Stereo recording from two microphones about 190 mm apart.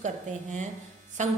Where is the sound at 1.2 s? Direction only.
40° right (ahead or behind).